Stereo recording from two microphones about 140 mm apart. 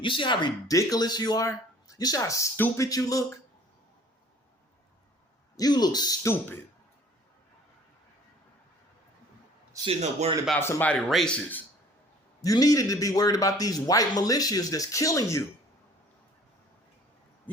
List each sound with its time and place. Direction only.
0.0 s a man's voice: 35° left (ahead or behind)
5.5 s a man's voice: 30° left (ahead or behind)
9.8 s a man's voice: 45° right (ahead or behind)
10.6 s speech: 15° left (ahead or behind)
11.1 s speech: 5° left (ahead or behind)
12.4 s a man's voice: 25° left (ahead or behind)